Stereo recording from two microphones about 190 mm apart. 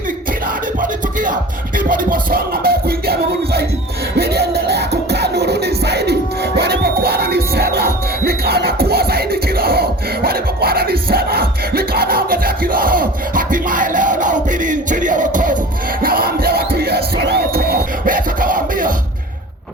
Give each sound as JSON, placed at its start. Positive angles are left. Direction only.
{"t": 0.8, "sound": "music", "side_deg": -45}